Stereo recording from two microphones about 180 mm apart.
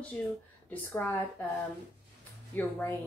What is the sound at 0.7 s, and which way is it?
Speech, 10° left (ahead or behind).